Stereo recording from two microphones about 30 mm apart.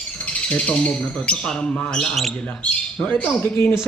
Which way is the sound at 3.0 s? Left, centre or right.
Left.